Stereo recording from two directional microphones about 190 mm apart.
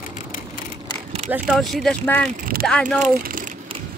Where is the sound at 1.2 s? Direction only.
5° right (ahead or behind).